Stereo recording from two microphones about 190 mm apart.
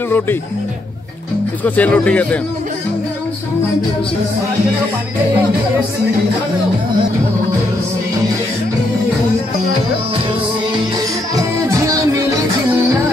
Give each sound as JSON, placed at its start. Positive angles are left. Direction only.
{"t": 1.6, "sound": "speech", "side_deg": 5}
{"t": 11.3, "sound": "music", "side_deg": -15}